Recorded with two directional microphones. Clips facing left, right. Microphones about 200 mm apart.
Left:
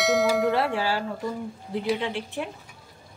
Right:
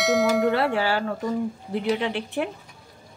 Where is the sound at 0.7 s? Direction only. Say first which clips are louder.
Right 3 dB; 65° right (ahead or behind).